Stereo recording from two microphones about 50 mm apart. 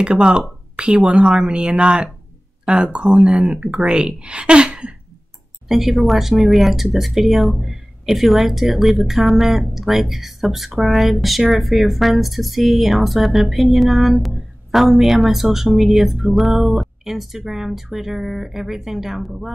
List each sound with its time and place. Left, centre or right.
0.0 s speech: right
5.7 s speech: centre